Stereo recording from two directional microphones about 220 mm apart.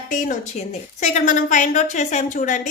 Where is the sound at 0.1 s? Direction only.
35° left (ahead or behind).